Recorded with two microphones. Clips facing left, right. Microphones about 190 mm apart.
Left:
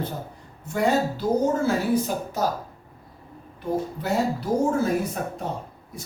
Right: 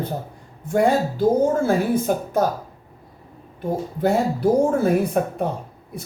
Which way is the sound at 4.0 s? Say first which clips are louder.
Right 5 dB; 55° right (ahead or behind).